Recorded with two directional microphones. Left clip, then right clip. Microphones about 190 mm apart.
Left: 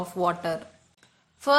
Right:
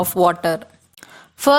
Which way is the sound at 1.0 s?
50° right (ahead or behind).